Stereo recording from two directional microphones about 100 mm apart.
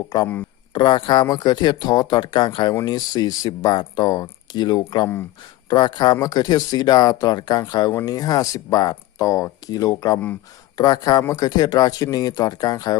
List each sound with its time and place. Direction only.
0.1 s speech: 35° left (ahead or behind)
0.7 s speech: 50° left (ahead or behind)